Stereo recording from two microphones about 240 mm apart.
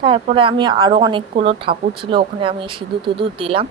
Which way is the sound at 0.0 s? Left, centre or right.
Right.